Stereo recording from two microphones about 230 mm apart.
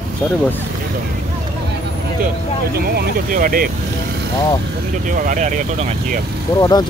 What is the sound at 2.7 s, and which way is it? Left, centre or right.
Speech, right.